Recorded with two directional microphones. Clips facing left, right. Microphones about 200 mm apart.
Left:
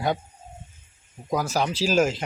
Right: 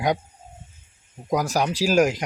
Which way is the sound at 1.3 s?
15° right (ahead or behind).